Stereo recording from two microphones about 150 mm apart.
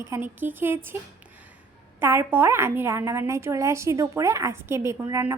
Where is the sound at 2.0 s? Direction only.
15° right (ahead or behind).